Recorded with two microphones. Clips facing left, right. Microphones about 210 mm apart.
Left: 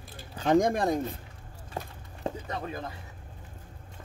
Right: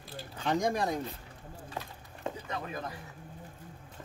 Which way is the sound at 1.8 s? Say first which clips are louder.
Left 6 dB; 35° left (ahead or behind).